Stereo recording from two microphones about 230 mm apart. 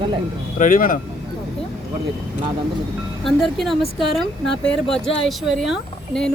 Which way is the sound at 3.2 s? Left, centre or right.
Centre.